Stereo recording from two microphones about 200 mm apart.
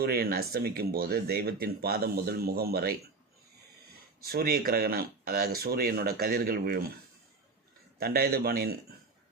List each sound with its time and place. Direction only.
0.0 s speech: 50° right (ahead or behind)
4.2 s speech: 50° right (ahead or behind)
7.9 s speech: 50° right (ahead or behind)